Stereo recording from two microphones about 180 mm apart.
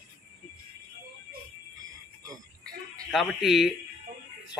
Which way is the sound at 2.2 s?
20° right (ahead or behind).